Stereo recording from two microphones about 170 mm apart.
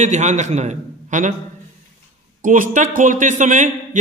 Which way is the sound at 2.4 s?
50° right (ahead or behind).